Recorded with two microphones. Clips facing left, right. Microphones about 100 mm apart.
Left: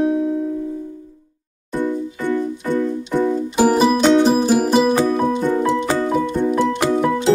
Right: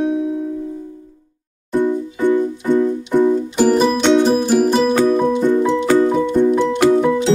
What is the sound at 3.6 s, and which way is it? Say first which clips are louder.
Music: left 1 dB; 5° left (ahead or behind).